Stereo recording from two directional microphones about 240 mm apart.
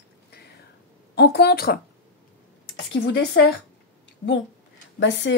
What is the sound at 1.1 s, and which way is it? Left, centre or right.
Speech, left.